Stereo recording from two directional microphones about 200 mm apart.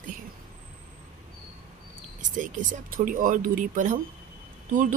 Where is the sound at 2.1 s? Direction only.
40° right (ahead or behind).